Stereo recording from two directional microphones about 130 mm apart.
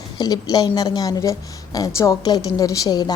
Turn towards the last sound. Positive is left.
turn(degrees=30)  # may be behind; listen again after turning